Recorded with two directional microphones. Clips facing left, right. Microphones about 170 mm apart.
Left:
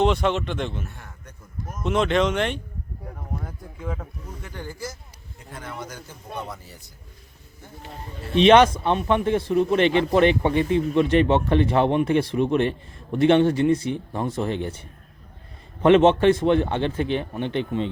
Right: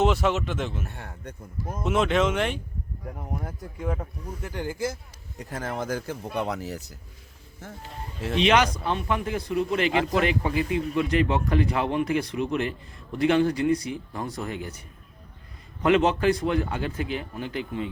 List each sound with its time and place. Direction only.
0.0 s speech: 5° right (ahead or behind)
3.8 s speech: 10° right (ahead or behind)
5.4 s speech: 90° right
8.5 s speech: 25° left (ahead or behind)